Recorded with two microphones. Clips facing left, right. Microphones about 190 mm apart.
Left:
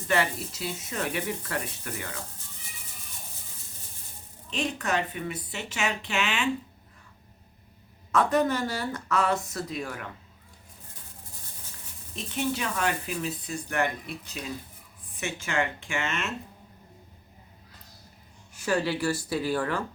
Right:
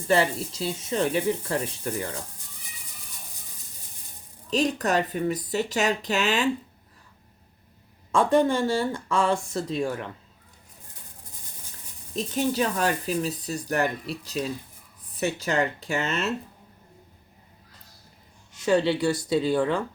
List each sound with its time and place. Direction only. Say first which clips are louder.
0.1 s speech: right 4 dB; 30° right (ahead or behind)
4.4 s speech: right 6 dB; 40° right (ahead or behind)
8.1 s speech: right 3 dB; 30° right (ahead or behind)
12.1 s speech: right 5 dB; 40° right (ahead or behind)
18.6 s speech: right 5 dB; 25° right (ahead or behind)